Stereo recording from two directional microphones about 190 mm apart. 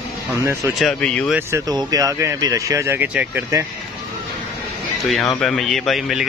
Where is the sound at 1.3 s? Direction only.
15° right (ahead or behind).